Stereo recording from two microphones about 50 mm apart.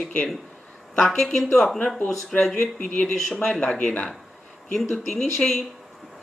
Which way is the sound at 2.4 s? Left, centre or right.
Centre.